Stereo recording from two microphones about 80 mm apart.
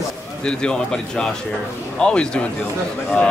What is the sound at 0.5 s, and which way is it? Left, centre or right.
Speech, centre.